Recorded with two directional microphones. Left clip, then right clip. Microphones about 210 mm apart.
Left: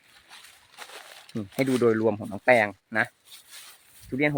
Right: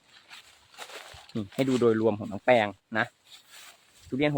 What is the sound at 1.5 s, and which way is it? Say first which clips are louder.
Speech: left 2 dB; 50° left (ahead or behind).